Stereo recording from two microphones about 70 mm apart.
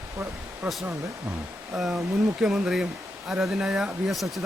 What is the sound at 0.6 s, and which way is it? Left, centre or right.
Speech, centre.